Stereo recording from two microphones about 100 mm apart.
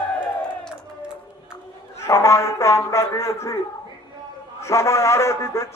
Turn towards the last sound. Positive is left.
turn(degrees=30)  # may be behind; listen again after turning